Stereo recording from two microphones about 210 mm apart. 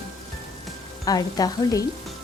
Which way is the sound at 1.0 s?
15° left (ahead or behind).